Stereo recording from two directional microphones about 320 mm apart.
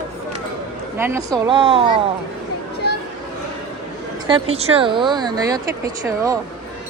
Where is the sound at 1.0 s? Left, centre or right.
Centre.